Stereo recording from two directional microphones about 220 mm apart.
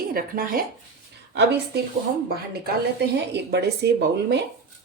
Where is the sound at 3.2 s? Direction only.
50° right (ahead or behind).